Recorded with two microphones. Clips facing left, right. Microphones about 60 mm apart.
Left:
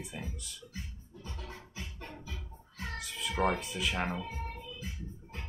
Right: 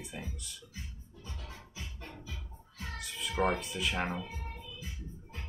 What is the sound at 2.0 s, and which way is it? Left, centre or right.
Music, left.